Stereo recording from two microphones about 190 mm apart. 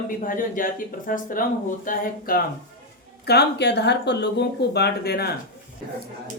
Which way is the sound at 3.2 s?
60° left (ahead or behind).